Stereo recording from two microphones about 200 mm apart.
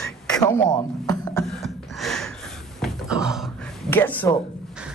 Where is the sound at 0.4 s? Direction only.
15° left (ahead or behind).